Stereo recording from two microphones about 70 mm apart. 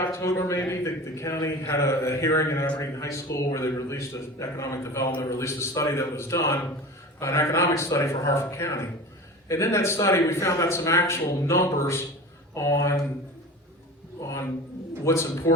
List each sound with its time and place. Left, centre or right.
0.0 s a man's voice: left
14.2 s a sound: left
15.0 s a man's voice: left